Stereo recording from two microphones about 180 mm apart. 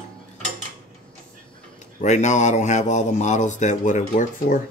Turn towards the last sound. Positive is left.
turn(degrees=45)  # may be behind; listen again after turning